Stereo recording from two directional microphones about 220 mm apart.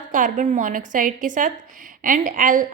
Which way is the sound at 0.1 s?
35° right (ahead or behind).